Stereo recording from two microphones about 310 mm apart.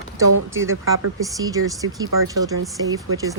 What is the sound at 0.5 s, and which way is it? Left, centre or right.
Speech, right.